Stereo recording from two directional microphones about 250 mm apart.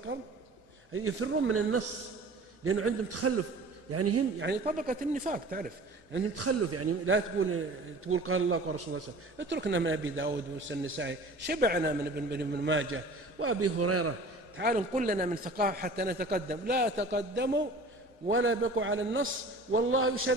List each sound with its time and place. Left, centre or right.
0.9 s a man's voice: right
4.7 s speech: right
6.3 s a man's voice: right
7.2 s a man's voice: right
9.4 s a man's voice: right
14.6 s a man's voice: right